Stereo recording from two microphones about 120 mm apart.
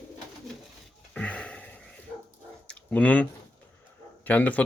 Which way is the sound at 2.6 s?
10° left (ahead or behind).